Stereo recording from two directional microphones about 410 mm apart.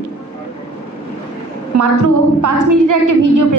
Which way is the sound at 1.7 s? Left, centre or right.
Right.